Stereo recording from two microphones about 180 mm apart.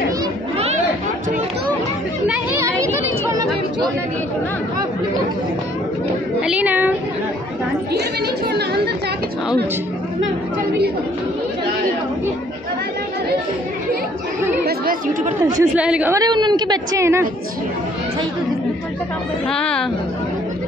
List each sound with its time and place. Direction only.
2.6 s a sound: 15° right (ahead or behind)
6.4 s a woman's voice: 10° right (ahead or behind)
8.5 s speech: 65° right (ahead or behind)
14.6 s chatter: 55° right (ahead or behind)
15.4 s a woman's voice: 10° right (ahead or behind)
16.2 s a woman's voice: 25° right (ahead or behind)
19.5 s speech: 5° left (ahead or behind)